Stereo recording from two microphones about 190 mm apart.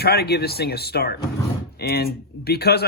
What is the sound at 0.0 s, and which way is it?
Speech, 55° left (ahead or behind).